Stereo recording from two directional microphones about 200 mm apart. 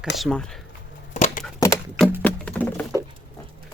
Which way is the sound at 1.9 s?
5° right (ahead or behind).